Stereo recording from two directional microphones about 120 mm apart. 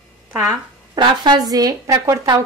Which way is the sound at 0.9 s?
40° right (ahead or behind).